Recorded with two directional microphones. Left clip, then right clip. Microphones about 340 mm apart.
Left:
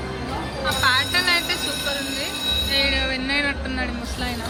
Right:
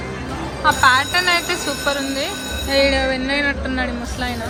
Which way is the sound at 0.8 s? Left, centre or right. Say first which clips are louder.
Right 3 dB; centre.